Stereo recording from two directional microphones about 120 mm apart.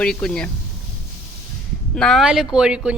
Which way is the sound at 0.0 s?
5° left (ahead or behind).